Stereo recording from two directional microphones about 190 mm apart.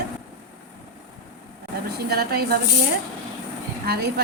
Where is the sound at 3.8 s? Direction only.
55° right (ahead or behind).